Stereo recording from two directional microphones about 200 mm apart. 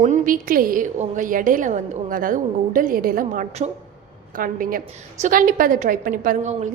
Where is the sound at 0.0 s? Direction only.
40° right (ahead or behind).